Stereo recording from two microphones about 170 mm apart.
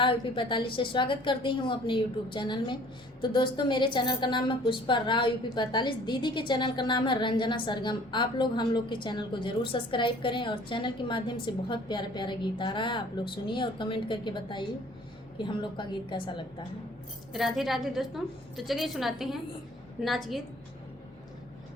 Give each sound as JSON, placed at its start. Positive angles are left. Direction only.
{"t": 0.0, "sound": "a woman's voice", "side_deg": 30}
{"t": 17.3, "sound": "a woman's voice", "side_deg": 0}